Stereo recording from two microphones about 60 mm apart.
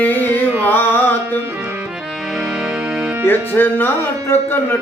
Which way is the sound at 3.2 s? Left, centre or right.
Left.